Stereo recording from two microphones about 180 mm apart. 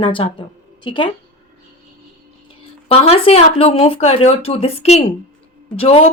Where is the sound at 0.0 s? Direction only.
30° left (ahead or behind).